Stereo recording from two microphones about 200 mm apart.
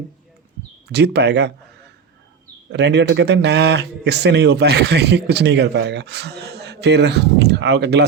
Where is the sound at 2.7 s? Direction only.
60° right (ahead or behind).